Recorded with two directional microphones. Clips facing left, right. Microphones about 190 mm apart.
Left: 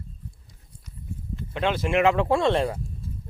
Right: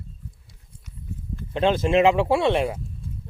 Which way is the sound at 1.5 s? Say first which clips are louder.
Right 5 dB; 30° right (ahead or behind).